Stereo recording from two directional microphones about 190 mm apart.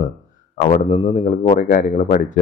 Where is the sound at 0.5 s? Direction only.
40° left (ahead or behind).